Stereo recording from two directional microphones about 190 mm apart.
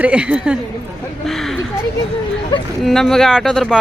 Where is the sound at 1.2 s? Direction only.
Centre (ahead or behind).